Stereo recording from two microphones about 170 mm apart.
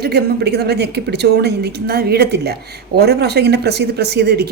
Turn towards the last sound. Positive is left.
turn(degrees=-70)  # may be behind; listen again after turning